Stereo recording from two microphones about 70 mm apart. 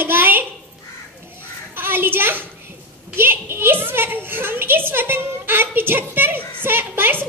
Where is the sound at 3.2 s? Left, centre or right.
Right.